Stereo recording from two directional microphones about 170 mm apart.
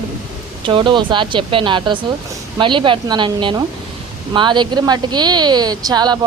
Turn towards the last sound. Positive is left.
turn(degrees=-25)  # may be behind; listen again after turning